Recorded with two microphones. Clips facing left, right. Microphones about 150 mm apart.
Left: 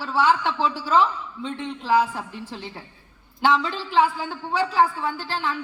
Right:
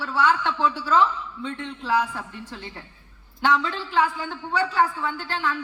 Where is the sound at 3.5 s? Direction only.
20° left (ahead or behind).